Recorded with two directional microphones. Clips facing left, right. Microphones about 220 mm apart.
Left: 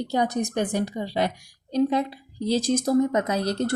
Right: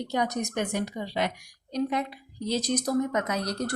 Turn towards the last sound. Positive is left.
turn(degrees=25)  # may be behind; listen again after turning